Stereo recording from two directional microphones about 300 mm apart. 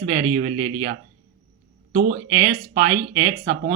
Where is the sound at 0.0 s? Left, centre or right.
Right.